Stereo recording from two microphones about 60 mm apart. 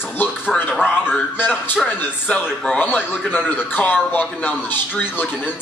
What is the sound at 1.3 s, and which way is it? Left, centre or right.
A man's voice, left.